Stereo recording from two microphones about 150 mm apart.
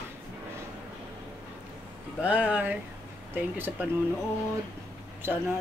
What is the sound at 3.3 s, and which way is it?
Speech, 15° right (ahead or behind).